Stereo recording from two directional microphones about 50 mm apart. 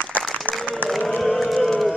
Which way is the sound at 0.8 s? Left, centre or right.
Centre.